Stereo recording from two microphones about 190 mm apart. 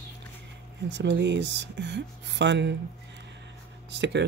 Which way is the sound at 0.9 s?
70° right (ahead or behind).